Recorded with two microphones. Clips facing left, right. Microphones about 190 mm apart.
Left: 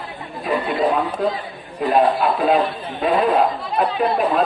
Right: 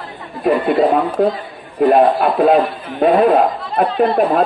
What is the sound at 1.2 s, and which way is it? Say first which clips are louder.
A man's voice: right 6 dB; 55° right (ahead or behind).